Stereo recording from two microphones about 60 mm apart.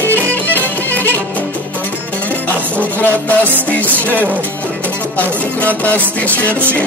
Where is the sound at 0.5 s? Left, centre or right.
Left.